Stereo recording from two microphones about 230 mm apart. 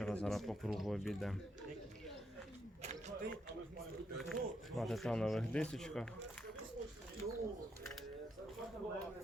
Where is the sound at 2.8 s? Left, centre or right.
Right.